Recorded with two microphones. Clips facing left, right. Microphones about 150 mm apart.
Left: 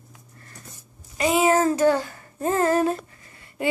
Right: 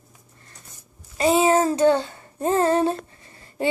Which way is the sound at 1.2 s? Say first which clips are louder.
Right 2 dB; 30° right (ahead or behind).